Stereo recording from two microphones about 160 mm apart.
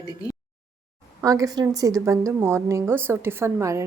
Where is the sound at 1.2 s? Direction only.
20° right (ahead or behind).